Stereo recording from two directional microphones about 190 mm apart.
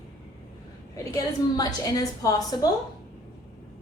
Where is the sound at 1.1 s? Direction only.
20° left (ahead or behind).